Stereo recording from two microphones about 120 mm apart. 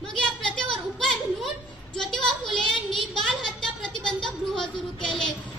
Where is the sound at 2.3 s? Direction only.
40° left (ahead or behind).